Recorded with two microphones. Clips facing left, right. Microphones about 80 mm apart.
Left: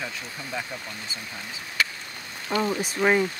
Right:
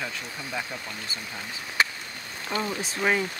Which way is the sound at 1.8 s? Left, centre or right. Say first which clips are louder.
Right 2 dB; right.